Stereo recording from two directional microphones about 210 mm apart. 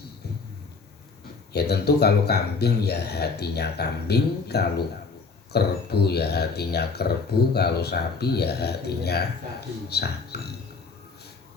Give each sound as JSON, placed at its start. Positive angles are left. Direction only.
{"t": 1.5, "sound": "speech", "side_deg": 50}